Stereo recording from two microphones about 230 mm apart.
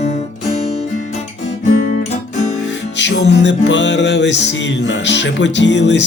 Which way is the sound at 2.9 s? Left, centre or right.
Left.